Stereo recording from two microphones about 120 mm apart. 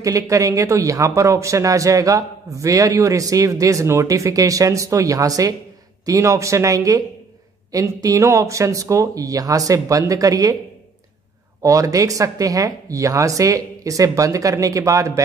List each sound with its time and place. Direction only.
0.0 s speech: 25° right (ahead or behind)
11.6 s speech: 25° right (ahead or behind)